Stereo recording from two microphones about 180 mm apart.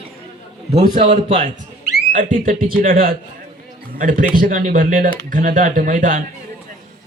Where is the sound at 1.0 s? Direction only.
35° right (ahead or behind).